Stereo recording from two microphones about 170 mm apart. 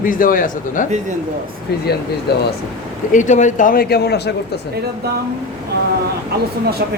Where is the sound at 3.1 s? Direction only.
45° left (ahead or behind); by 4.3 s 75° left (ahead or behind).